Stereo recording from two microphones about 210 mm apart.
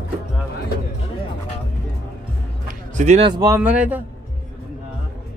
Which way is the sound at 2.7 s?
35° right (ahead or behind).